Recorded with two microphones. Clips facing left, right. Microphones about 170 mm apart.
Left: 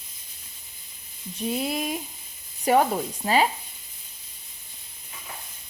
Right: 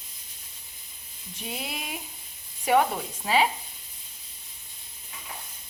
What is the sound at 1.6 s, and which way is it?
Speech, 40° left (ahead or behind).